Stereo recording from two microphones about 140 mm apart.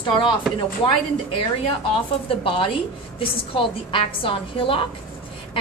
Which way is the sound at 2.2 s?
40° left (ahead or behind).